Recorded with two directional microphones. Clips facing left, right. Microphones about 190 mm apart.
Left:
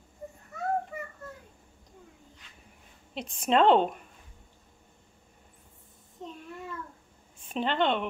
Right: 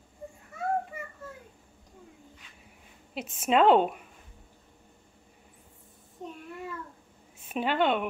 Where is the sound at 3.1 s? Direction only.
5° right (ahead or behind).